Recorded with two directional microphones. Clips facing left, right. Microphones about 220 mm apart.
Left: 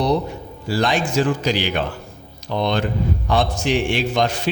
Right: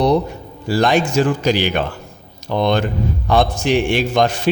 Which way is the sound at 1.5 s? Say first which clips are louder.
Right 4 dB; 55° right (ahead or behind).